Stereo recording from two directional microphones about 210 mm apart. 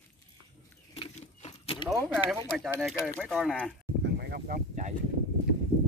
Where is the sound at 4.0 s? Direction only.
50° right (ahead or behind).